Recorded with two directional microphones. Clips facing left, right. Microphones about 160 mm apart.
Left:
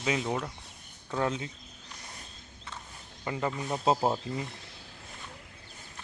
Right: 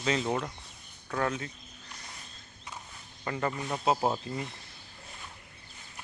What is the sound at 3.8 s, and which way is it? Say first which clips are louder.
Speech: left 1 dB; 25° left (ahead or behind).